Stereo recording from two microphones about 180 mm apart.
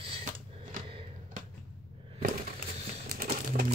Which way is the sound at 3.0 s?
55° right (ahead or behind).